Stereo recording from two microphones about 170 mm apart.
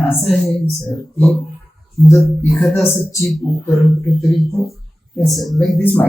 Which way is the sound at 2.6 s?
15° left (ahead or behind).